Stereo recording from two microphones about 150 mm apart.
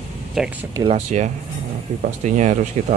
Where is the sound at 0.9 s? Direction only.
50° right (ahead or behind).